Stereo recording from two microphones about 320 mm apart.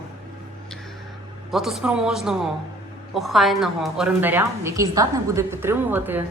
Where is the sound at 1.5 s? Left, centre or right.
Centre.